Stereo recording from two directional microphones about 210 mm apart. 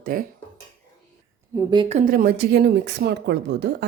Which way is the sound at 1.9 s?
40° right (ahead or behind).